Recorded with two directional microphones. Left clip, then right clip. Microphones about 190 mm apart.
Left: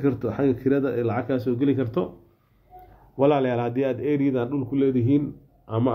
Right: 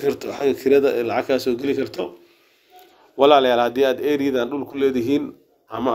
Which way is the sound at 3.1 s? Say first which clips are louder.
Right 7 dB; 25° right (ahead or behind).